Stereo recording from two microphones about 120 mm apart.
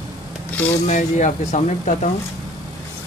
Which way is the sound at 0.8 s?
90° left.